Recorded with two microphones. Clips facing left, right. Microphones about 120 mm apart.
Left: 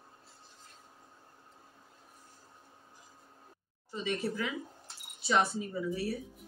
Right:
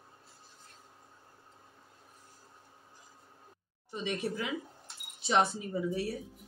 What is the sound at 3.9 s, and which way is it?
Speech, 20° right (ahead or behind).